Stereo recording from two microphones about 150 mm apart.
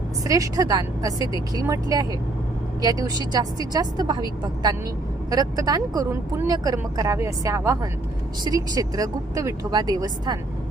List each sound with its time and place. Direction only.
0.3 s speech: 25° right (ahead or behind)